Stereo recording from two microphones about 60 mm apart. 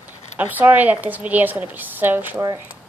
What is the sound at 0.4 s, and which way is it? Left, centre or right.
A woman's voice, right.